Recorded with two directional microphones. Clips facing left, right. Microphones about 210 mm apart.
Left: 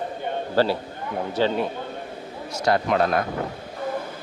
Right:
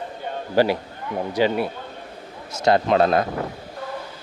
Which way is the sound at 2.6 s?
25° right (ahead or behind).